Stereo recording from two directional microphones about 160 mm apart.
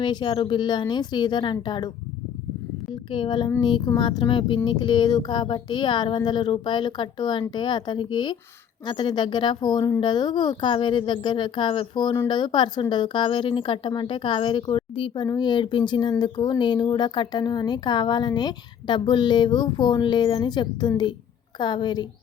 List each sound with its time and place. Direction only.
0.0 s speech: 30° left (ahead or behind)
2.9 s speech: 30° left (ahead or behind)